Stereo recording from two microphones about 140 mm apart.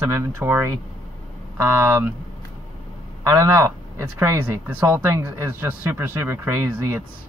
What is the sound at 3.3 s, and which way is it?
Speech, 20° right (ahead or behind).